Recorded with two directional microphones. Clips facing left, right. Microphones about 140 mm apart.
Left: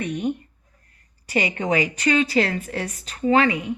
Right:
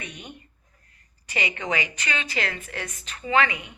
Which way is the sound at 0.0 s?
50° left (ahead or behind).